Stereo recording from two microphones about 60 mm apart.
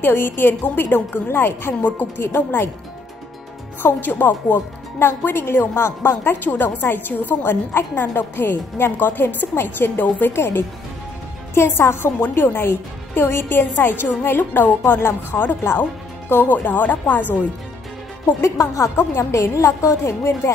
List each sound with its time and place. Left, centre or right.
0.0 s speech: left
3.8 s speech: left
18.4 s speech: left